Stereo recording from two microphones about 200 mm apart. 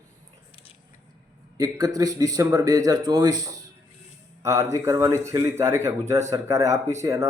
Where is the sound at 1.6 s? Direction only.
20° right (ahead or behind).